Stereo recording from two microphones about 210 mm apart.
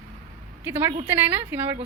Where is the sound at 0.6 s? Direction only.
10° right (ahead or behind).